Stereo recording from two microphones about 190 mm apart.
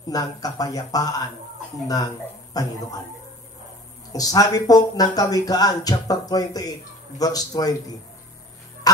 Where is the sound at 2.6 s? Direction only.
20° left (ahead or behind).